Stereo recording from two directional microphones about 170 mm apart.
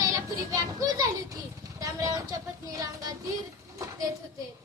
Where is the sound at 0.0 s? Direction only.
20° right (ahead or behind).